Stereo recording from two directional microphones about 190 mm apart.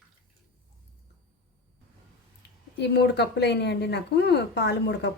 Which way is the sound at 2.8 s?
60° left (ahead or behind).